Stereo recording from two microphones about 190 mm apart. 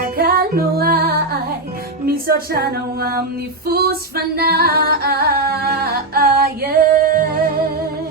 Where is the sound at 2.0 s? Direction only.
55° right (ahead or behind).